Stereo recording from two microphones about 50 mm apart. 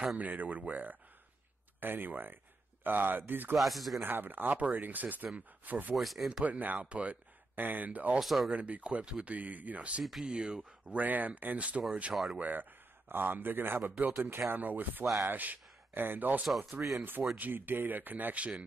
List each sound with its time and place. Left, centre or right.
0.2 s speech: right
3.5 s speech: centre
4.0 s speech: right
5.9 s speech: centre
6.4 s speech: right
7.5 s speech: right
8.2 s speech: centre
8.5 s speech: right
10.2 s speech: centre
11.0 s speech: right
12.1 s speech: centre
12.4 s a man's voice: right